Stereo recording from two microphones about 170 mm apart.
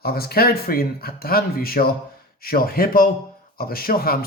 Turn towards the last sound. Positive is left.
turn(degrees=60)  # may be behind; listen again after turning